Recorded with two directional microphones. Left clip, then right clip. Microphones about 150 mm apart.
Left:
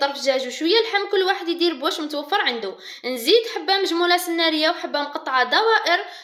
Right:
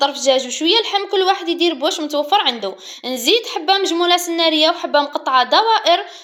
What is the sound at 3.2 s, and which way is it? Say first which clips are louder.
Speech: right 1 dB; 25° left (ahead or behind).